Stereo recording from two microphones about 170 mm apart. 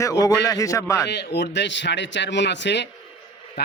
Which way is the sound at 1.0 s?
80° left.